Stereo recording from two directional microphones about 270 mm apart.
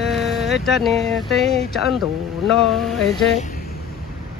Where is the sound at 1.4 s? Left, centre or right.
Right.